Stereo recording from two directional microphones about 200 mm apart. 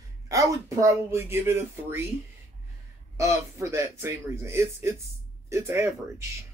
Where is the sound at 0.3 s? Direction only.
15° right (ahead or behind).